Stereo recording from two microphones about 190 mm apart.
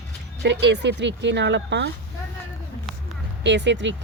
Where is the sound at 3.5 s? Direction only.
70° right (ahead or behind).